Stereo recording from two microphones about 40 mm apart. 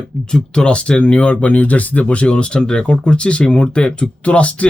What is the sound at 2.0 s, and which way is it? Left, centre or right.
Speech, left.